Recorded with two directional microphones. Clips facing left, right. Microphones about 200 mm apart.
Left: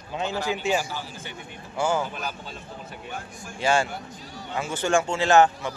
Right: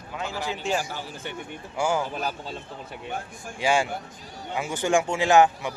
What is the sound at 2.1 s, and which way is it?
Speech, 35° right (ahead or behind).